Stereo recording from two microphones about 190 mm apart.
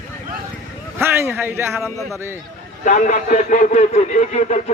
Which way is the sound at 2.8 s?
40° left (ahead or behind).